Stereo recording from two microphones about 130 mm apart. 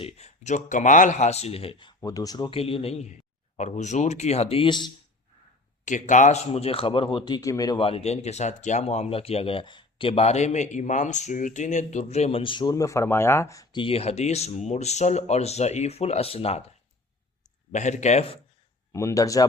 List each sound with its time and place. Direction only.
0.0 s speech: 60° left (ahead or behind); by 2.0 s 40° left (ahead or behind)
2.0 s speech: 25° left (ahead or behind)
2.5 s speech: 45° left (ahead or behind)
3.6 s speech: 65° left (ahead or behind); by 4.9 s 40° left (ahead or behind)
5.8 s speech: 70° left (ahead or behind); by 7.2 s 40° left (ahead or behind)
7.3 s speech: 30° left (ahead or behind)
7.8 s speech: 50° left (ahead or behind); by 13.7 s 25° left (ahead or behind)
13.7 s speech: 45° left (ahead or behind)
17.7 s speech: 65° left (ahead or behind)
18.9 s speech: 25° left (ahead or behind)